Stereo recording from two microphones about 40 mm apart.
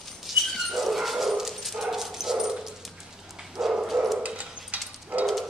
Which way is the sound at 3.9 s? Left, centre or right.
Centre.